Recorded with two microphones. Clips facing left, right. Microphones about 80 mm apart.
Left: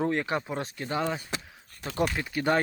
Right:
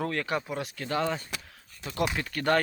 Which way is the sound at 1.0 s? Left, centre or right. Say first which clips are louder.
Even; centre.